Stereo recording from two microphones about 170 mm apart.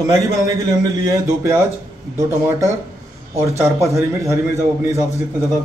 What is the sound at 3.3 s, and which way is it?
A man's voice, 15° right (ahead or behind).